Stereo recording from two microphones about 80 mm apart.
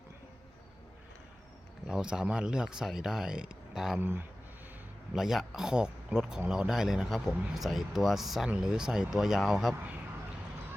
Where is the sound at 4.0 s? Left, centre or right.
Right.